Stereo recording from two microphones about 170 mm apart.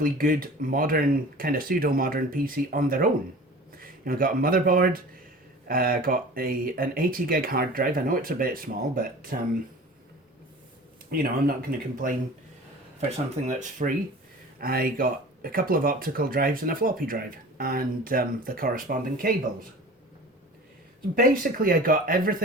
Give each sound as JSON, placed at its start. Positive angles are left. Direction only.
{"t": 0.0, "sound": "speech", "side_deg": -55}
{"t": 11.1, "sound": "speech", "side_deg": -60}
{"t": 13.0, "sound": "speech", "side_deg": -40}
{"t": 14.6, "sound": "speech", "side_deg": -60}
{"t": 21.2, "sound": "speech", "side_deg": -55}